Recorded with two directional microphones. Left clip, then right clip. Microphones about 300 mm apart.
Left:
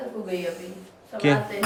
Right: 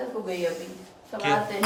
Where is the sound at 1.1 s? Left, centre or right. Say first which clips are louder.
Left 2 dB; centre.